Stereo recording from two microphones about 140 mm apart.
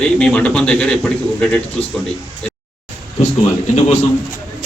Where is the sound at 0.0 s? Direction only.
10° left (ahead or behind).